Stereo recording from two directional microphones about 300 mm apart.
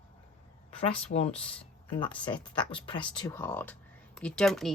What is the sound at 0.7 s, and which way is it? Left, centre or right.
Speech, centre.